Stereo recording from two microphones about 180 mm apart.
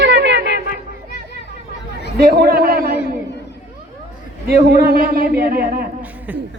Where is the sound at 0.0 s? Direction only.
75° right (ahead or behind).